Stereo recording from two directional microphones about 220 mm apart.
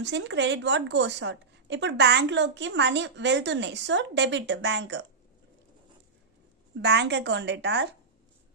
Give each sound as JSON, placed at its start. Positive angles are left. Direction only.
{"t": 0.0, "sound": "a woman's voice", "side_deg": -50}
{"t": 6.8, "sound": "a woman's voice", "side_deg": -50}